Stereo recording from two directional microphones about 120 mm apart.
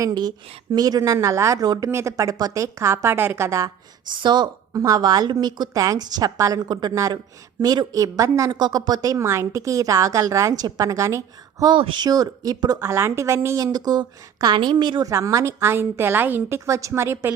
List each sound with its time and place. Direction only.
0.0 s a woman's voice: 35° right (ahead or behind)
4.1 s a woman's voice: 40° right (ahead or behind)
11.6 s a woman's voice: 40° right (ahead or behind)
12.8 s a woman's voice: 20° right (ahead or behind); by 15.1 s 40° right (ahead or behind)
15.1 s a woman's voice: 25° right (ahead or behind)